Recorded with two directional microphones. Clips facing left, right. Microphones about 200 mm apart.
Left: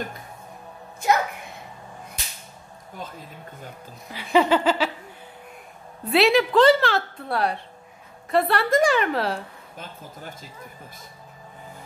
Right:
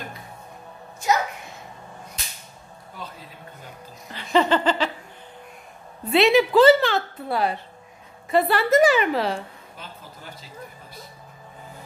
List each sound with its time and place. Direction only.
3.0 s a man's voice: 45° left (ahead or behind)
4.1 s a sound: 10° left (ahead or behind)
6.0 s a woman's voice: centre (ahead or behind)
9.8 s a man's voice: 50° left (ahead or behind)